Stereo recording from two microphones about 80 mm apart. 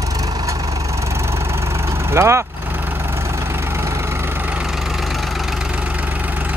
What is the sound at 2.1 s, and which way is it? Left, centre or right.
Speech, right.